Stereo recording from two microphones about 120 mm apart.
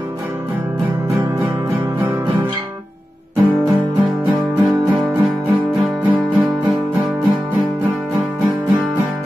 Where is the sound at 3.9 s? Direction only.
15° right (ahead or behind).